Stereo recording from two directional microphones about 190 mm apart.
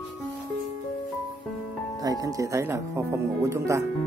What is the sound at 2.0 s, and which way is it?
Speech, 20° right (ahead or behind).